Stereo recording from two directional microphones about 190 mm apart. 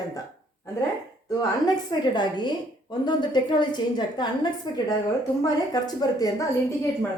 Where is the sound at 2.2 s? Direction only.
25° left (ahead or behind).